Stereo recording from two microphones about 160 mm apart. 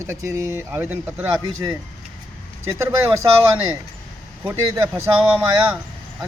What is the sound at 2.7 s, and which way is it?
Speech, 15° right (ahead or behind).